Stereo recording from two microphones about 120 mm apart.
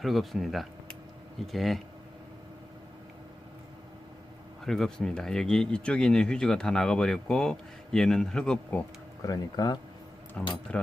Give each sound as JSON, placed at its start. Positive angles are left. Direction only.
{"t": 0.0, "sound": "speech", "side_deg": 0}
{"t": 4.6, "sound": "speech", "side_deg": 5}
{"t": 9.2, "sound": "speech", "side_deg": 30}
{"t": 10.4, "sound": "speech", "side_deg": 10}